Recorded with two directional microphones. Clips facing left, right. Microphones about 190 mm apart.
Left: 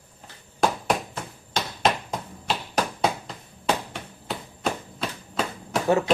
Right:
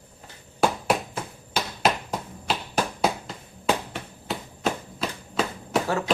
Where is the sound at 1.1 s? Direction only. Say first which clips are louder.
Right 1 dB; 5° right (ahead or behind).